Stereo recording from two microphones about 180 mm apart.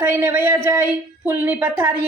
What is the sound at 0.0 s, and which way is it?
A woman's voice, 15° right (ahead or behind).